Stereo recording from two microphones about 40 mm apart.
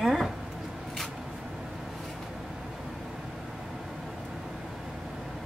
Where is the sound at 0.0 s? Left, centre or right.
Centre.